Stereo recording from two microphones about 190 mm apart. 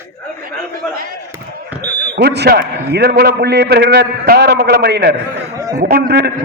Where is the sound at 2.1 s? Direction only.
60° right (ahead or behind).